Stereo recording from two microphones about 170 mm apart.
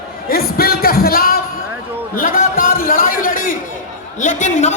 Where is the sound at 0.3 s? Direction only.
60° left (ahead or behind).